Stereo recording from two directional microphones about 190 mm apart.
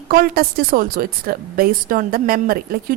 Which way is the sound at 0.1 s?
50° right (ahead or behind).